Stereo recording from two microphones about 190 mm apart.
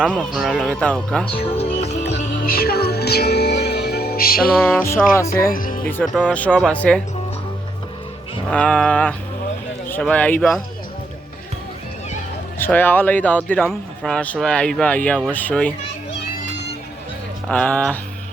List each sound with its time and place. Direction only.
0.2 s speech: centre (ahead or behind)
1.3 s music: 30° left (ahead or behind)
2.2 s music: 50° left (ahead or behind)
4.6 s speech: 10° left (ahead or behind)
5.5 s speech: 45° left (ahead or behind)
5.8 s speech: 5° left (ahead or behind)
8.4 s speech: 5° left (ahead or behind)
12.5 s speech: 10° left (ahead or behind)
17.5 s speech: 5° left (ahead or behind)